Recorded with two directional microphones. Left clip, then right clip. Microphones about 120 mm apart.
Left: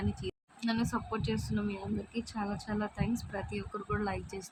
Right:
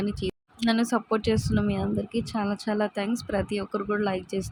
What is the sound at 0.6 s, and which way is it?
Speech, 60° right (ahead or behind).